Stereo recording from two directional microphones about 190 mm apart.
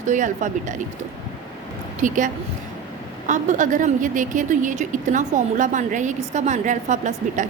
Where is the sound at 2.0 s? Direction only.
45° right (ahead or behind).